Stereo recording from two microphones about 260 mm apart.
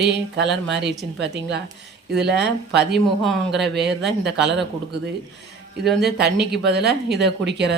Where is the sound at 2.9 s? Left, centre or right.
Centre.